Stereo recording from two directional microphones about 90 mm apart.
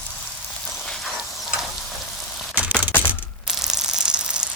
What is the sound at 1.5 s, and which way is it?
Frying, 5° right (ahead or behind).